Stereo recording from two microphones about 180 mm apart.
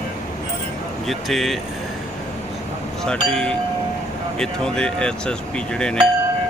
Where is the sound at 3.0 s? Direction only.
5° left (ahead or behind).